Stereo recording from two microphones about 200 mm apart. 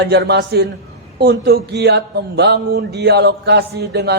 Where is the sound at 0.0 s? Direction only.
55° right (ahead or behind).